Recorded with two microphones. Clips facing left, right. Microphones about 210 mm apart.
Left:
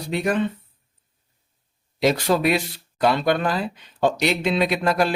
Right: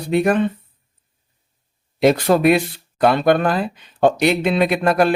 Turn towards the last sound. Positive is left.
turn(degrees=-55)  # may be behind; listen again after turning